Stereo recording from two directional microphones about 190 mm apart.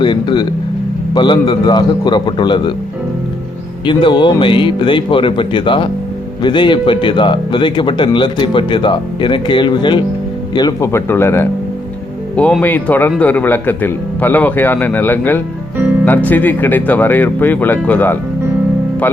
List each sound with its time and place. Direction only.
0.0 s speech: 25° left (ahead or behind)
3.8 s speech: 25° left (ahead or behind); by 18.2 s 10° left (ahead or behind)